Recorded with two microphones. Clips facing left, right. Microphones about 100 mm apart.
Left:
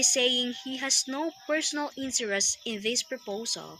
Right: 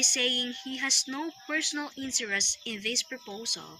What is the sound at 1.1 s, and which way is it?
Speech, 30° left (ahead or behind).